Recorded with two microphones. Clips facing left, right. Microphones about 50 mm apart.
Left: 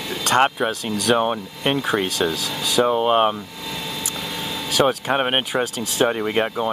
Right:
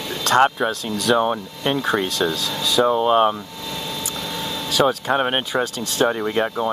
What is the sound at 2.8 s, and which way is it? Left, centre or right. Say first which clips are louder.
Speech: right 1 dB; left.